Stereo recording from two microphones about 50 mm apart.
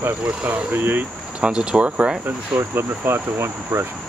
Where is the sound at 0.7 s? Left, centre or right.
Right.